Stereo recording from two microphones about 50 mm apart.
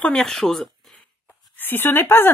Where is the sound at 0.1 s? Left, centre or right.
Centre.